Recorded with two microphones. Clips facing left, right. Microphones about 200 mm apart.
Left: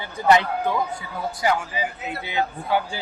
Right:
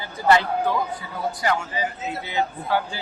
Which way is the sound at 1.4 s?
10° left (ahead or behind).